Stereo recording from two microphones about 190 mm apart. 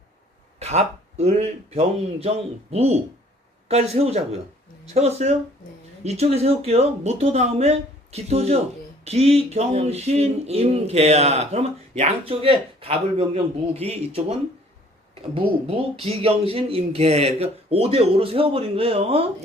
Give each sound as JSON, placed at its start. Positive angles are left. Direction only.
{"t": 0.6, "sound": "speech", "side_deg": -35}